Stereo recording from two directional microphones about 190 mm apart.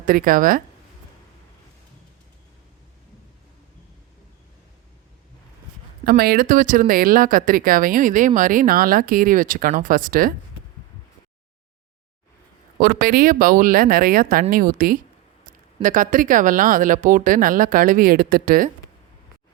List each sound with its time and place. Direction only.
0.0 s speech: 50° right (ahead or behind)
6.1 s speech: 55° right (ahead or behind)
12.8 s speech: 50° right (ahead or behind)